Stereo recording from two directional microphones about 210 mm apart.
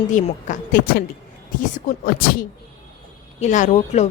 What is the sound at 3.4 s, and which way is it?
Speech, 35° left (ahead or behind).